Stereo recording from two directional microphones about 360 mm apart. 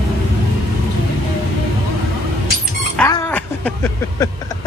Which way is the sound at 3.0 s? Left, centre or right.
Centre.